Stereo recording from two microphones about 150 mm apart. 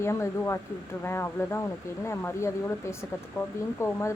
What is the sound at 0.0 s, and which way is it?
A woman's voice, 15° left (ahead or behind).